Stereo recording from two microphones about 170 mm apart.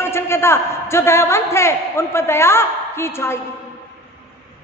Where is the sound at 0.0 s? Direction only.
15° left (ahead or behind).